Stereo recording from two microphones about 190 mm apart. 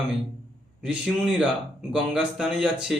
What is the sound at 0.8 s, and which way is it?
Speech, 5° right (ahead or behind).